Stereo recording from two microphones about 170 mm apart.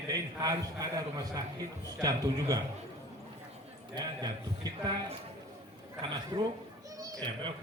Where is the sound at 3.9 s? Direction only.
25° right (ahead or behind).